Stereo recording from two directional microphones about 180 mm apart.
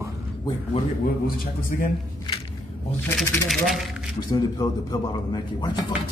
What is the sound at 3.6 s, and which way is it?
Speech, centre (ahead or behind).